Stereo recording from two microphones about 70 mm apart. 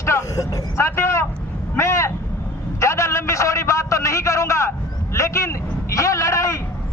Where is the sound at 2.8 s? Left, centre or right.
Left.